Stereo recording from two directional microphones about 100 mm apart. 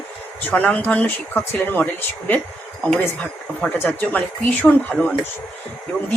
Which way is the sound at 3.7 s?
15° left (ahead or behind).